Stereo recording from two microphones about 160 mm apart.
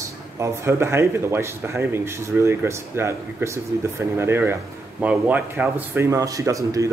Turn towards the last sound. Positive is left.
turn(degrees=-20)  # may be behind; listen again after turning